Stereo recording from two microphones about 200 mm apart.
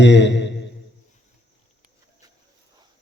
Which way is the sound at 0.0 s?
60° left (ahead or behind).